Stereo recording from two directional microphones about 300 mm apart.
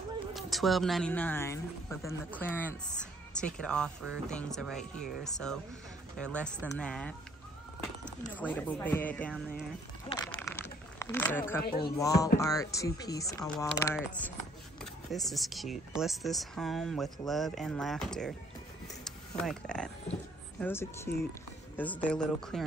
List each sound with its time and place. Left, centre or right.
0.3 s speech: centre
8.4 s speech: centre
10.4 s a sound: centre
11.6 s speech: left
12.0 s speech: centre
19.0 s a sound: centre
20.6 s speech: centre